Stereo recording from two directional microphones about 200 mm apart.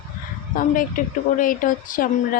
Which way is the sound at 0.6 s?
40° left (ahead or behind).